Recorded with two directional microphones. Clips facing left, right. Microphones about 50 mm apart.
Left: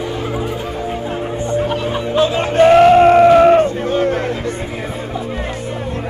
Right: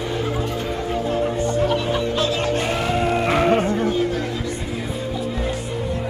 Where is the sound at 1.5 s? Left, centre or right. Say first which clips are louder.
Left 2 dB; left.